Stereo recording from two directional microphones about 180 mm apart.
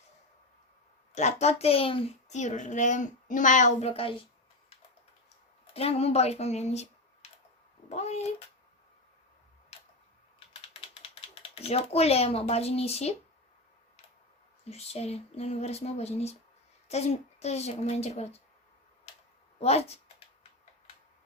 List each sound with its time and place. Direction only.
1.1 s a child's voice: 40° left (ahead or behind)
5.7 s a child's voice: 35° left (ahead or behind)
11.6 s a child's voice: 35° left (ahead or behind)
14.7 s a child's voice: 35° left (ahead or behind)
19.5 s a sound: 35° left (ahead or behind)